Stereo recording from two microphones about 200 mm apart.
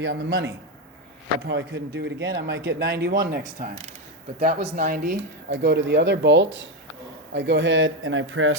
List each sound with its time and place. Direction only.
0.0 s speech: 60° right (ahead or behind); by 4.9 s 45° right (ahead or behind)
5.5 s speech: 60° right (ahead or behind); by 8.5 s 80° right